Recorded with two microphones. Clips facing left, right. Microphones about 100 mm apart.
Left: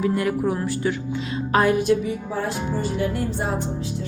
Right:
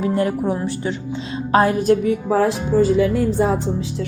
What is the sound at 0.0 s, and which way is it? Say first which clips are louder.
Speech: right 2 dB; 30° right (ahead or behind).